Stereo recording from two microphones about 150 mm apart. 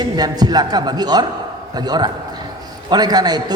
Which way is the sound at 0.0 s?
25° right (ahead or behind).